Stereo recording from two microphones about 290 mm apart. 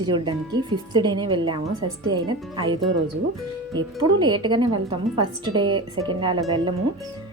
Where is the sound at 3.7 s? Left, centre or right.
Centre.